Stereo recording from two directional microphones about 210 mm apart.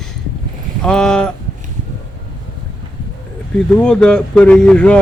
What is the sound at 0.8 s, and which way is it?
Speech, 5° left (ahead or behind).